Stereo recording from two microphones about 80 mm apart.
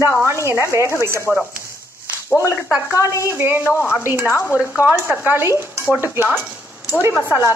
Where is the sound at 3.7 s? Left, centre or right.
Left.